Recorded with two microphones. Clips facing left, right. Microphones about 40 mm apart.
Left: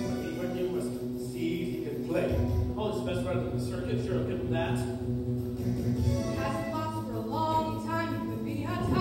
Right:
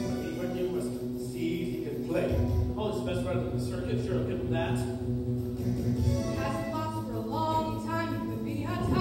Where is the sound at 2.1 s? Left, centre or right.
Left.